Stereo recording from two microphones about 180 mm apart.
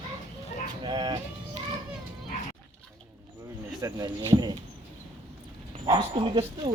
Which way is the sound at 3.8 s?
20° right (ahead or behind).